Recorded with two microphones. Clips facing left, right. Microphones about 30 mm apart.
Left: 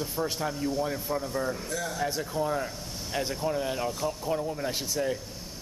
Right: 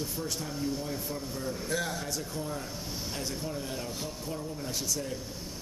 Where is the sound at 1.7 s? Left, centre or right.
Right.